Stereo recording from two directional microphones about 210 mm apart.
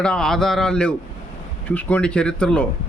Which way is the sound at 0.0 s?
5° left (ahead or behind).